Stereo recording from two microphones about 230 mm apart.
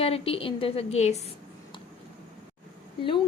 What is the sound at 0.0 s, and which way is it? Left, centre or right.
A woman's voice, left.